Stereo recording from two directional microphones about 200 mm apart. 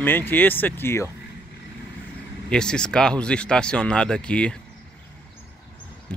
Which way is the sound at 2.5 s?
5° left (ahead or behind).